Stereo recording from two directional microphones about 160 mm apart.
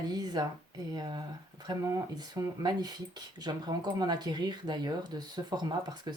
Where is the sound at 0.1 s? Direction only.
25° right (ahead or behind).